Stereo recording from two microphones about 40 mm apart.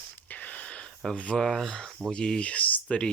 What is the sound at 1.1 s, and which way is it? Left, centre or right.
Speech, left.